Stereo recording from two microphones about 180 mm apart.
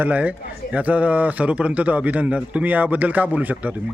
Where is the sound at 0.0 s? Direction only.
10° right (ahead or behind).